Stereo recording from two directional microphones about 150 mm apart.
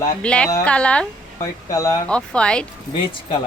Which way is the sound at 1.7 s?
20° left (ahead or behind).